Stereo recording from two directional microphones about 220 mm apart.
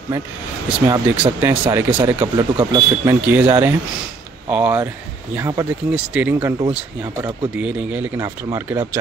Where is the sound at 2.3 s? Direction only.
20° right (ahead or behind).